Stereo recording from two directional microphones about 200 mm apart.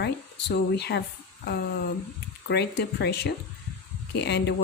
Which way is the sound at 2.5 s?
55° left (ahead or behind).